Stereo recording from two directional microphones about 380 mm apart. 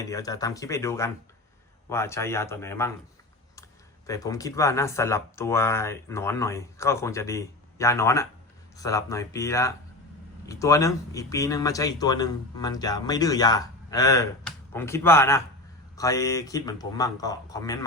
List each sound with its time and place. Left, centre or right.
0.0 s speech: centre
4.0 s speech: centre